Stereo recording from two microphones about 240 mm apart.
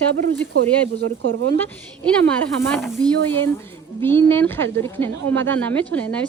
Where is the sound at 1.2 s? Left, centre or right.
Right.